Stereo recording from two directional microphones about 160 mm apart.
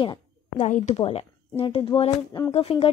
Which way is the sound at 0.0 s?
35° left (ahead or behind).